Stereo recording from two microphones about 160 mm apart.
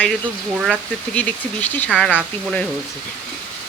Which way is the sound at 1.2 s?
10° left (ahead or behind).